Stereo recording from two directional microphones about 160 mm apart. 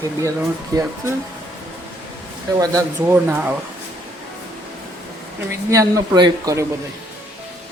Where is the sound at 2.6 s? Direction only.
20° right (ahead or behind).